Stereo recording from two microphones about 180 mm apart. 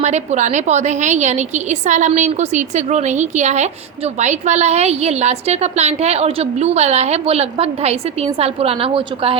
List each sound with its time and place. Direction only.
0.0 s a woman's voice: 40° right (ahead or behind)